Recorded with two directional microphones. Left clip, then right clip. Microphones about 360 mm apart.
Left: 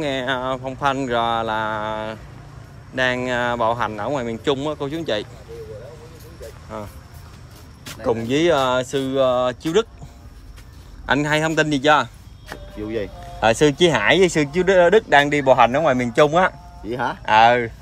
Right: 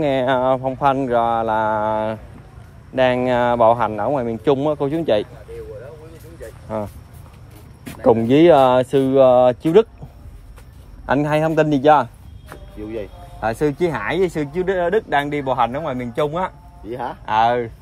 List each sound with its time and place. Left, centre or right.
0.0 s speech: centre
8.0 s speech: centre
11.1 s speech: centre
12.4 s a sound: left
13.4 s speech: centre
16.8 s speech: left
17.3 s speech: centre